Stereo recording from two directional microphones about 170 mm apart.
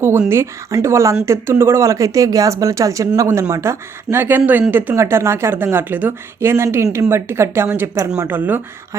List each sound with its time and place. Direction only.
0.0 s speech: 15° right (ahead or behind)